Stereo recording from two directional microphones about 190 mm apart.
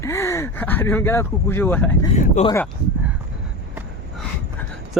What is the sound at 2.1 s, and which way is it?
Speech, 35° left (ahead or behind).